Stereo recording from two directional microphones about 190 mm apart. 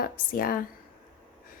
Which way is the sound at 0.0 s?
50° left (ahead or behind).